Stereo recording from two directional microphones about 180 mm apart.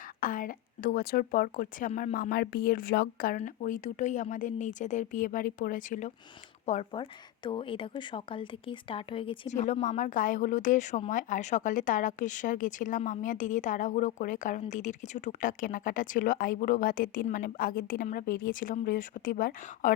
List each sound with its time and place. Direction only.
0.2 s speech: 50° left (ahead or behind)
1.9 s a woman's voice: 35° left (ahead or behind)
2.1 s speech: 55° left (ahead or behind)
3.3 s speech: 45° left (ahead or behind)
6.9 s speech: 25° left (ahead or behind)
9.5 s a woman's voice: 40° left (ahead or behind)